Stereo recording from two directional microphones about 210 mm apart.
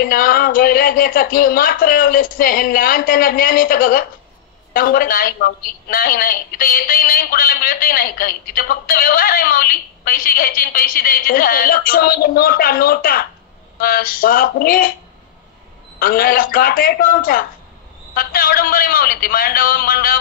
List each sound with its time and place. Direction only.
0.0 s a woman's voice: 45° left (ahead or behind)
16.0 s a woman's voice: 45° left (ahead or behind)